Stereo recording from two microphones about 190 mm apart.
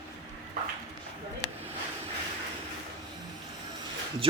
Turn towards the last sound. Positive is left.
turn(degrees=-30)  # may be behind; listen again after turning